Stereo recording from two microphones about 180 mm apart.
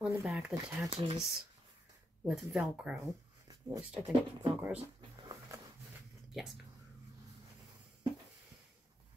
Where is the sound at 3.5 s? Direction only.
15° right (ahead or behind).